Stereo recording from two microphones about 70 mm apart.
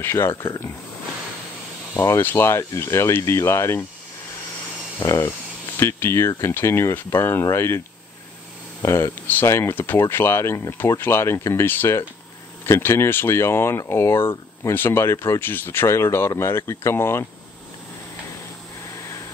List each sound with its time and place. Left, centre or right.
0.0 s speech: left
2.0 s speech: left
5.8 s speech: left
8.8 s speech: left